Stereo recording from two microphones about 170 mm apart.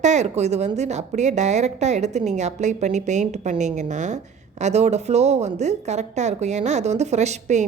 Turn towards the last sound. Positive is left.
turn(degrees=-40)  # may be behind; listen again after turning